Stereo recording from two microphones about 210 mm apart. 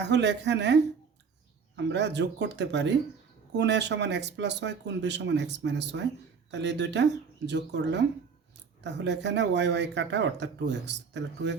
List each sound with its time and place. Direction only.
0.0 s speech: 55° right (ahead or behind)